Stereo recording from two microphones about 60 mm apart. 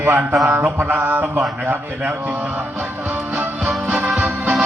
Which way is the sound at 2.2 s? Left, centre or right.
Right.